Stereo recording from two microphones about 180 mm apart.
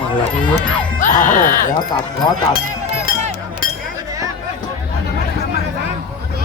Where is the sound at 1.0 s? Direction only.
45° left (ahead or behind).